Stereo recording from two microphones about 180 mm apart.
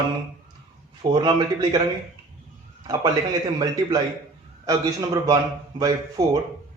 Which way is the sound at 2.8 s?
20° right (ahead or behind).